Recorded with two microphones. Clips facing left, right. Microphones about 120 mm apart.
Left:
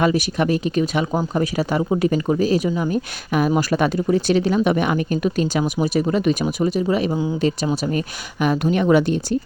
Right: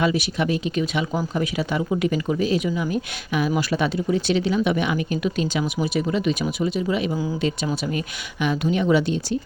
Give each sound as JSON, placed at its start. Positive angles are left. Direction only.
{"t": 0.0, "sound": "speech", "side_deg": 45}
{"t": 7.1, "sound": "speech", "side_deg": 25}
{"t": 7.9, "sound": "speech", "side_deg": 45}